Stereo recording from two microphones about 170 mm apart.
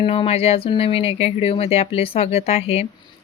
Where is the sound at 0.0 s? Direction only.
35° left (ahead or behind).